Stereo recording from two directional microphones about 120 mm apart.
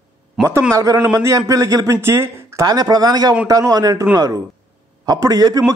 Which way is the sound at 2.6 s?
35° right (ahead or behind).